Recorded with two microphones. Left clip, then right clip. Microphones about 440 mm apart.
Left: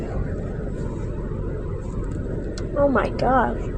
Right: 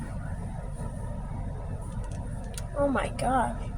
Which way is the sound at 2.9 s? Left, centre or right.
Right.